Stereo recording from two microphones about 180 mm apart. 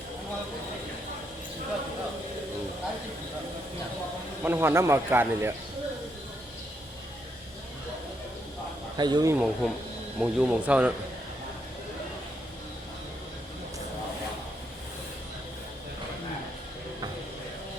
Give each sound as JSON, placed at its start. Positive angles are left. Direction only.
{"t": 4.4, "sound": "speech", "side_deg": -10}
{"t": 9.0, "sound": "speech", "side_deg": -25}
{"t": 9.3, "sound": "speech", "side_deg": -5}